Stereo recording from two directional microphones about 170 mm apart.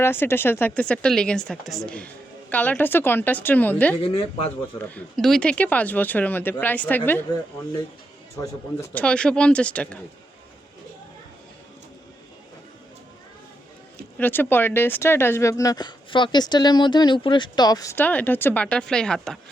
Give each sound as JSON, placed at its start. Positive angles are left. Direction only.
{"t": 0.0, "sound": "speech", "side_deg": 15}
{"t": 4.0, "sound": "speech", "side_deg": 35}
{"t": 4.8, "sound": "speech", "side_deg": 5}
{"t": 8.4, "sound": "speech", "side_deg": 15}
{"t": 14.2, "sound": "speech", "side_deg": 10}